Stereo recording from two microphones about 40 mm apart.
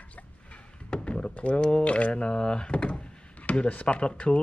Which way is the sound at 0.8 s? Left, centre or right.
Left.